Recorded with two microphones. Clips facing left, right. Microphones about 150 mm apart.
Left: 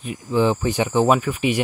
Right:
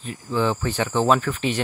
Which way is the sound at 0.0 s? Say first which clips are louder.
Left 4 dB; 15° left (ahead or behind).